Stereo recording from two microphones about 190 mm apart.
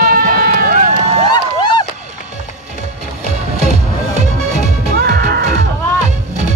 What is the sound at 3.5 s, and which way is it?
Music, 35° right (ahead or behind).